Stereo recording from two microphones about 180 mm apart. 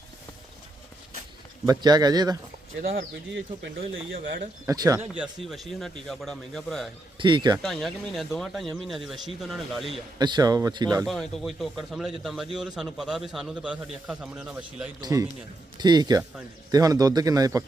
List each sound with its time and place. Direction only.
1.8 s a man's voice: 20° right (ahead or behind)
2.8 s speech: 65° right (ahead or behind)
4.6 s a man's voice: 20° right (ahead or behind)
5.1 s a man's voice: 5° right (ahead or behind)
7.2 s a man's voice: 25° right (ahead or behind)
7.6 s a man's voice: centre (ahead or behind)
10.2 s a man's voice: 25° right (ahead or behind)
11.0 s a man's voice: centre (ahead or behind)
15.0 s a man's voice: 20° right (ahead or behind)